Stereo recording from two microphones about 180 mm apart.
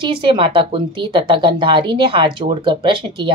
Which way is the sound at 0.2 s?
25° right (ahead or behind).